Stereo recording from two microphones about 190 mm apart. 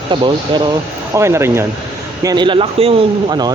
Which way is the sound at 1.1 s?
15° right (ahead or behind).